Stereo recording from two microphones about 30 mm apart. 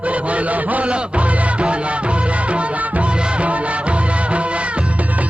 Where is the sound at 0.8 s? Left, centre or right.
Right.